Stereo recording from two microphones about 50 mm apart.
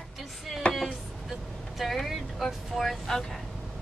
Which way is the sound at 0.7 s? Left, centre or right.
Left.